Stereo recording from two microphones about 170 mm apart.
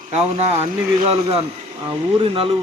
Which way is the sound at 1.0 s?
35° right (ahead or behind).